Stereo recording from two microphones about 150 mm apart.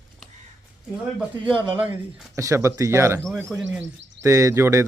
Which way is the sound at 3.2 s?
Centre (ahead or behind).